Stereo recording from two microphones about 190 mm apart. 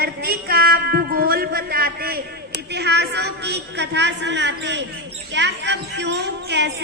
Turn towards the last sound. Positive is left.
turn(degrees=-65)  # may be behind; listen again after turning